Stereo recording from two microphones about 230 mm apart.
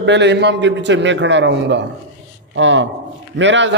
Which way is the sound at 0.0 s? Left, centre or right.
Right.